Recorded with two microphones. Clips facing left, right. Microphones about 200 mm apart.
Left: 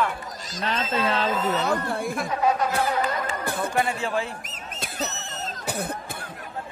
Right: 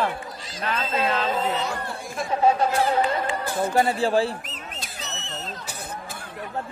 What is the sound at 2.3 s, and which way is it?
Speech, 30° right (ahead or behind).